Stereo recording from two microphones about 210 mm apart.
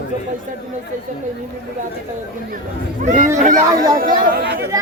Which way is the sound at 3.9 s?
45° right (ahead or behind).